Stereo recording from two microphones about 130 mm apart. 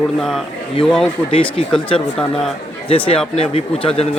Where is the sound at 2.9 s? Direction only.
45° left (ahead or behind).